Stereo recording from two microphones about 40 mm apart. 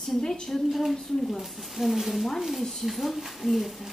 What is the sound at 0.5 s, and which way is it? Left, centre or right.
A woman's voice, centre.